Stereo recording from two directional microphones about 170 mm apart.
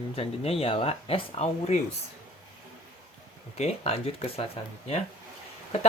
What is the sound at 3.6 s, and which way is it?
Speech, 40° left (ahead or behind).